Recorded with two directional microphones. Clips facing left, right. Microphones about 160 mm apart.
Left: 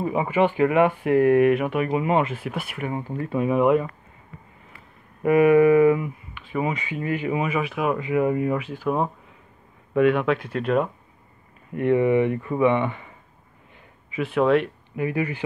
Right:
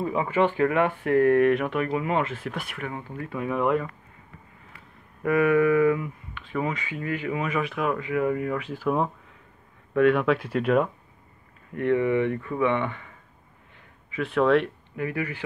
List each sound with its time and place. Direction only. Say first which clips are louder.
0.0 s speech: left 2 dB; 15° left (ahead or behind)
3.0 s speech: left 7 dB; 30° left (ahead or behind)
5.2 s speech: left 5 dB; 15° left (ahead or behind)
7.9 s speech: left 4 dB; 20° left (ahead or behind)
8.5 s speech: left 1 dB; 5° left (ahead or behind)
11.7 s speech: left 3 dB; 15° left (ahead or behind)
14.1 s speech: left 1 dB; 5° left (ahead or behind)
15.0 s speech: left 4 dB; 20° left (ahead or behind)